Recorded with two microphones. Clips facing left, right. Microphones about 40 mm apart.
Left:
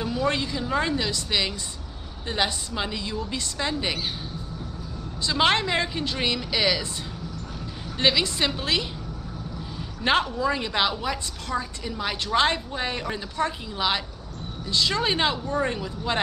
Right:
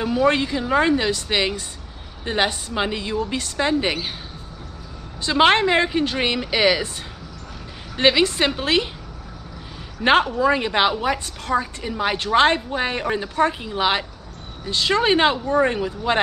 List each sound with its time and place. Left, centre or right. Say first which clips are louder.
0.0 s a woman's voice: right 7 dB; right
5.2 s a woman's voice: right 6 dB; right
8.0 s a woman's voice: right 5 dB; right
10.2 s a woman's voice: right 6 dB; right